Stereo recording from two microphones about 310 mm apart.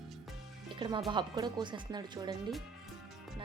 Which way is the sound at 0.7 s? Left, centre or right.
Centre.